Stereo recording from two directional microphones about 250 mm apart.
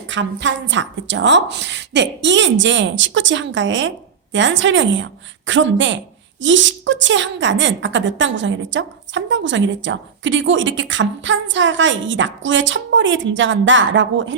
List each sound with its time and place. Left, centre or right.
0.1 s a woman's voice: right